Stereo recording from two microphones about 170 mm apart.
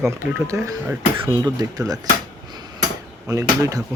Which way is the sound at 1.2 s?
30° right (ahead or behind).